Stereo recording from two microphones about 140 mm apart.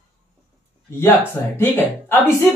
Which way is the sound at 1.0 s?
15° left (ahead or behind).